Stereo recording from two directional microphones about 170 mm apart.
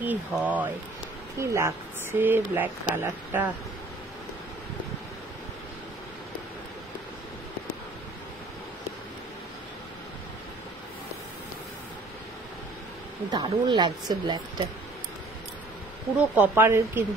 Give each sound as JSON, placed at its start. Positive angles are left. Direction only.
{"t": 0.0, "sound": "speech", "side_deg": -10}
{"t": 13.3, "sound": "speech", "side_deg": -25}
{"t": 16.3, "sound": "speech", "side_deg": -10}